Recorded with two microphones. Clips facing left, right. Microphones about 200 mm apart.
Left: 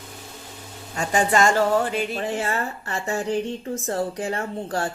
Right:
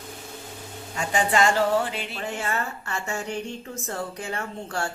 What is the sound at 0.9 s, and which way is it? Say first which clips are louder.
Speech: left 2 dB; 45° left (ahead or behind).